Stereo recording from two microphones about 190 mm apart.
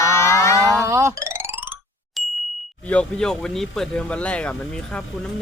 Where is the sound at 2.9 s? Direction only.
5° left (ahead or behind).